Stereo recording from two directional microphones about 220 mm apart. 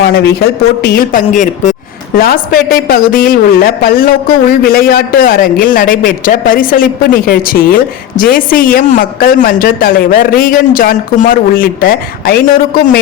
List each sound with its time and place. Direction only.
0.0 s a man's voice: 45° left (ahead or behind)